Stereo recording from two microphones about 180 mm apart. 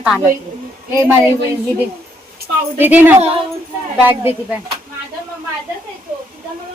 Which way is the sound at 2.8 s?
10° right (ahead or behind).